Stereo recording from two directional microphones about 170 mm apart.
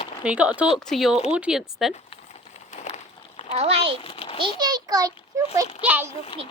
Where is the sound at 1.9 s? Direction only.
40° left (ahead or behind).